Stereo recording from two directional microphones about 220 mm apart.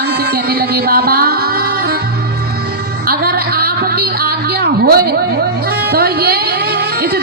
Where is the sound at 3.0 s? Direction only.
45° right (ahead or behind).